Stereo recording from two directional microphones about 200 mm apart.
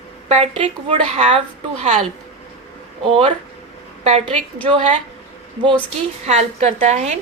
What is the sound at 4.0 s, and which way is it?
Speech, 30° right (ahead or behind).